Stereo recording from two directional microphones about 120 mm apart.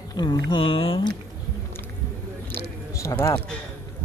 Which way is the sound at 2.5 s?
20° left (ahead or behind).